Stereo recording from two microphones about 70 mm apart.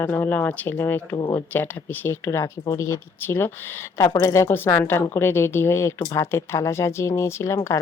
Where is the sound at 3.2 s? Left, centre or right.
Left.